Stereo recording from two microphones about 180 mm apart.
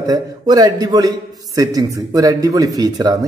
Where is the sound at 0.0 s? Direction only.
20° right (ahead or behind).